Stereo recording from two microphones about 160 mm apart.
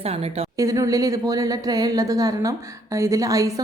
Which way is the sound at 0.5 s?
20° right (ahead or behind).